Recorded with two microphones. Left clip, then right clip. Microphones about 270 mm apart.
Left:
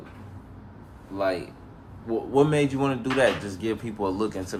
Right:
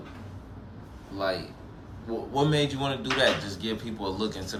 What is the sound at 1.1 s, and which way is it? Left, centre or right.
Speech, centre.